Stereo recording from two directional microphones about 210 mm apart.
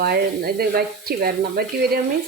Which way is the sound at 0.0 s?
45° right (ahead or behind).